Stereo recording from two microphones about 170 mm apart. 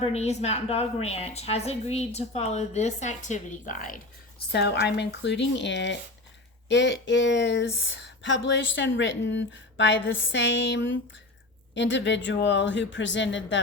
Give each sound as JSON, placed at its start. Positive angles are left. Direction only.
{"t": 0.0, "sound": "a woman's voice", "side_deg": 40}
{"t": 4.5, "sound": "a woman's voice", "side_deg": 75}